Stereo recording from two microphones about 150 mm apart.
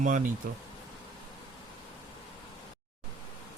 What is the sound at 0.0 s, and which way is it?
Speech, 60° right (ahead or behind).